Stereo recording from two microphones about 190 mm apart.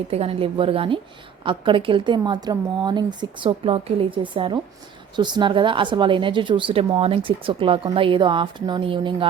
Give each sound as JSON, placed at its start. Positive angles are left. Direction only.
{"t": 0.1, "sound": "a woman's voice", "side_deg": -30}